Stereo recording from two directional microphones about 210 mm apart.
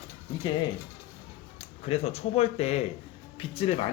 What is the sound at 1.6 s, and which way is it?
Speech, 30° left (ahead or behind).